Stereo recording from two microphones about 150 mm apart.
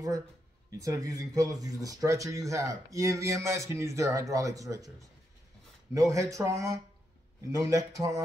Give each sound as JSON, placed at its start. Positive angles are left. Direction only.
{"t": 0.7, "sound": "speech", "side_deg": -25}
{"t": 5.9, "sound": "speech", "side_deg": -20}